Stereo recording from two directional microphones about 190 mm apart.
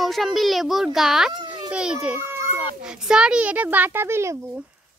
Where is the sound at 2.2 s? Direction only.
15° right (ahead or behind).